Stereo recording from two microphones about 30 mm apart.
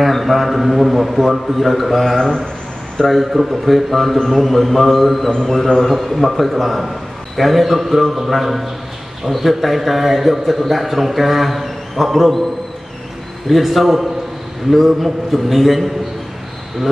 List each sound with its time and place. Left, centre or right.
0.0 s a man's voice: centre
3.0 s a man's voice: left
3.6 s a man's voice: centre
13.5 s a man's voice: centre